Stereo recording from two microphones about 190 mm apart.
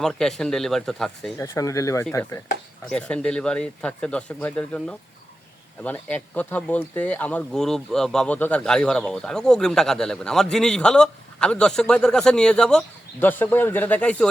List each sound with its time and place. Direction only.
0.0 s speech: centre (ahead or behind)
1.4 s speech: 15° left (ahead or behind)
2.9 s speech: 5° left (ahead or behind)